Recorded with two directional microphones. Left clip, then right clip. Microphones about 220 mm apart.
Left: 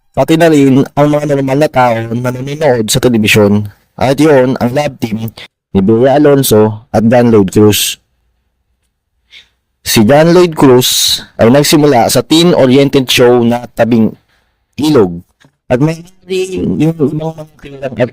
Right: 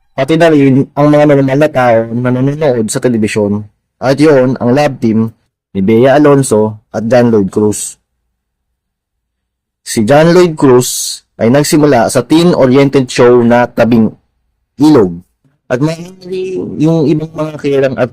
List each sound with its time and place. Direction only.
0.2 s speech: 40° left (ahead or behind)
9.8 s speech: 35° left (ahead or behind)
15.7 s speech: 35° left (ahead or behind)